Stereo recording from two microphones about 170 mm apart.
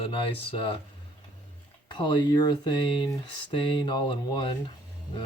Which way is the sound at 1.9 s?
30° left (ahead or behind).